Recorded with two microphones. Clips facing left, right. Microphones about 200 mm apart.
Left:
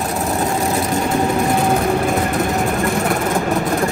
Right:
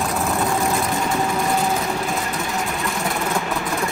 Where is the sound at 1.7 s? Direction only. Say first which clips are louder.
Left 7 dB; 55° left (ahead or behind).